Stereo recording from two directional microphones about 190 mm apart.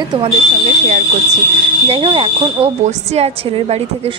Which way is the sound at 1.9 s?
25° right (ahead or behind).